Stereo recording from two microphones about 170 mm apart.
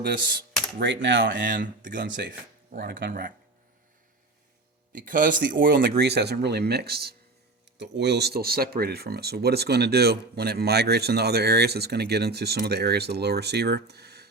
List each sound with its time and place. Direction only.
0.0 s speech: 60° right (ahead or behind)
0.8 s speech: 90° right; by 2.0 s 50° right (ahead or behind)
2.0 s speech: 90° right
2.7 s speech: 55° right (ahead or behind)
4.9 s speech: 50° right (ahead or behind)
5.7 s speech: 80° right
7.8 s speech: 85° right